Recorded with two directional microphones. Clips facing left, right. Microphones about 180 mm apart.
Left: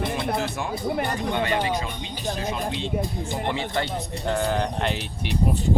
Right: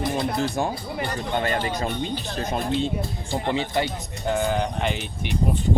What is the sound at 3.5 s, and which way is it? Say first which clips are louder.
Speech: right 4 dB; 20° right (ahead or behind).